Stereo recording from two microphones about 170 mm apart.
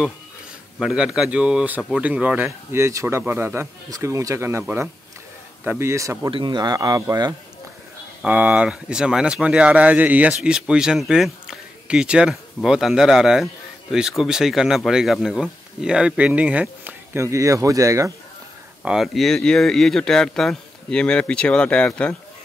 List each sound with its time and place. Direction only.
0.7 s speech: 5° right (ahead or behind); by 7.3 s 20° right (ahead or behind)
8.2 s speech: 10° right (ahead or behind)
18.8 s speech: centre (ahead or behind)